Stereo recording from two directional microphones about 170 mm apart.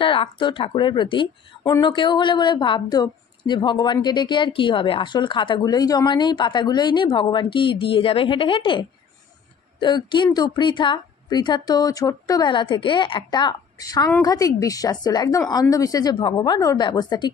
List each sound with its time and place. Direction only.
0.0 s a woman's voice: 30° left (ahead or behind)